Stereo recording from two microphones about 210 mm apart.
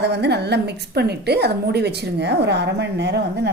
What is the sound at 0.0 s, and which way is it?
A woman's voice, 55° right (ahead or behind).